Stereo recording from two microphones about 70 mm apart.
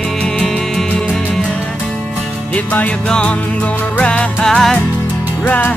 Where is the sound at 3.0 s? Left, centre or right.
Centre.